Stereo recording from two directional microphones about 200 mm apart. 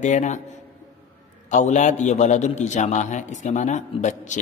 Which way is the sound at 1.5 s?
35° left (ahead or behind).